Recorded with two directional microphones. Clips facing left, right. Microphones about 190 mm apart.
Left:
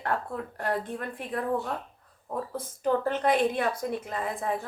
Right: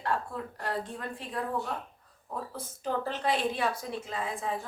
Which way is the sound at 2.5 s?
50° left (ahead or behind).